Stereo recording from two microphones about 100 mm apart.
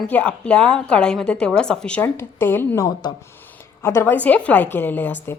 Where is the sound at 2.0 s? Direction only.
20° left (ahead or behind).